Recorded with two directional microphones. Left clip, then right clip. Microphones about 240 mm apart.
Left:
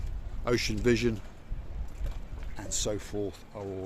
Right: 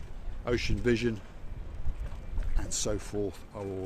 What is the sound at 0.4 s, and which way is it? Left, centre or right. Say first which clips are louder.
Speech: left 2 dB; left.